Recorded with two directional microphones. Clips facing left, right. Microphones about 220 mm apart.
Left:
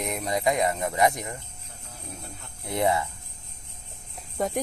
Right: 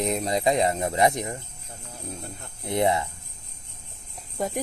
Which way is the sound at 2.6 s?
20° right (ahead or behind).